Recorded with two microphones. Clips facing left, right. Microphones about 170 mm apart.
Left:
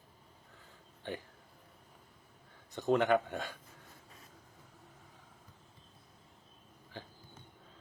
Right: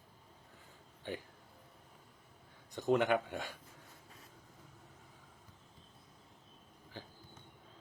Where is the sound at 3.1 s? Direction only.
15° right (ahead or behind).